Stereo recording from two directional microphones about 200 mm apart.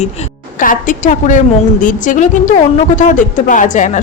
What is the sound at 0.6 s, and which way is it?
A woman's voice, 40° left (ahead or behind).